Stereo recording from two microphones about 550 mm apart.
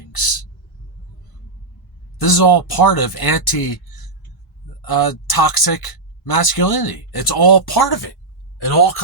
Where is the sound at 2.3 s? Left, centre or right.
Left.